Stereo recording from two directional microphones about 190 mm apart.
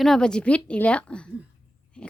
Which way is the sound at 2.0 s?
5° left (ahead or behind).